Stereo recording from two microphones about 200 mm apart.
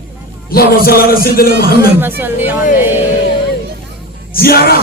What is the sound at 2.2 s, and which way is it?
Speech, 10° right (ahead or behind).